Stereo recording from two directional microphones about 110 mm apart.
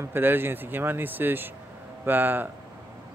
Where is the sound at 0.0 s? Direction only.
20° right (ahead or behind).